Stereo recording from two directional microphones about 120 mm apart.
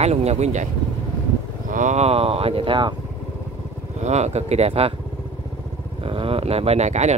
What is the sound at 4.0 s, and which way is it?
Speech, 70° right (ahead or behind).